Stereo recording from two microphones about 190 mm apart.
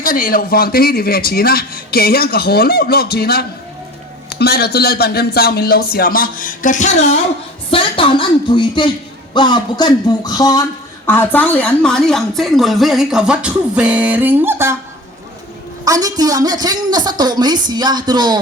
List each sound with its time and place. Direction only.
0.0 s a man's voice: 45° left (ahead or behind)
7.7 s music: 30° left (ahead or behind)
11.0 s a woman's voice: 10° left (ahead or behind); by 14.8 s 10° right (ahead or behind)
15.8 s a woman's voice: 20° right (ahead or behind)